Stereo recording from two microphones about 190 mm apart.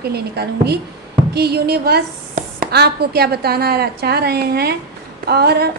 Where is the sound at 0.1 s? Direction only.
60° right (ahead or behind).